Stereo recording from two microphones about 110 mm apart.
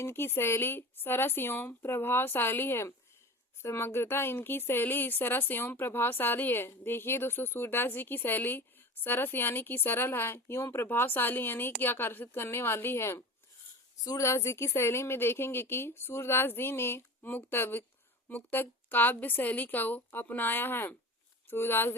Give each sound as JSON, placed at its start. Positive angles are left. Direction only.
{"t": 0.0, "sound": "a woman's voice", "side_deg": 20}